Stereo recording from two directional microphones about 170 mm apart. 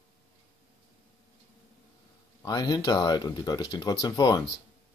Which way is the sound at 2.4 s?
25° left (ahead or behind).